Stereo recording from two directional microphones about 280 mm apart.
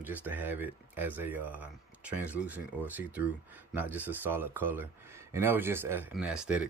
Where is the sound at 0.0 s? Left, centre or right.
Centre.